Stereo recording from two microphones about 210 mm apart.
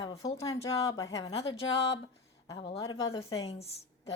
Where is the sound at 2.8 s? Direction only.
20° left (ahead or behind).